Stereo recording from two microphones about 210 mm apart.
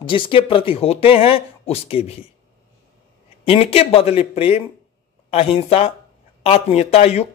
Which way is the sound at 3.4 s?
30° left (ahead or behind).